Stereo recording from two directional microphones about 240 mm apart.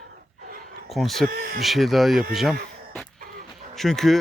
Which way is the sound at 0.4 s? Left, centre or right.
Right.